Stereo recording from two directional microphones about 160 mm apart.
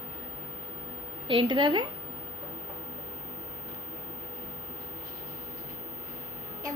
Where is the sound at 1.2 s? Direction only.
30° right (ahead or behind).